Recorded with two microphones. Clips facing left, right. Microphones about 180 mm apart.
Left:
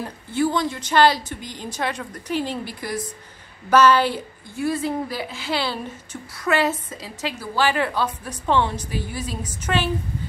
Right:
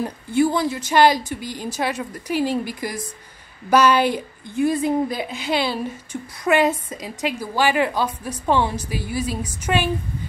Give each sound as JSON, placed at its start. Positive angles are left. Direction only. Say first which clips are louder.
{"t": 0.0, "sound": "a woman's voice", "louder": "right 4 dB", "side_deg": -15}